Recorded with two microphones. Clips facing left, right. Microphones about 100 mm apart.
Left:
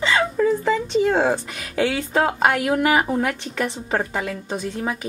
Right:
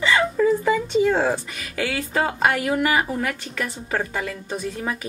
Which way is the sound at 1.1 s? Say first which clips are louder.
Left 2 dB; centre (ahead or behind).